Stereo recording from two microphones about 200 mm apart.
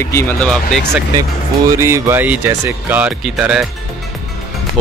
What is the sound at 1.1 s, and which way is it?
Speech, 15° right (ahead or behind).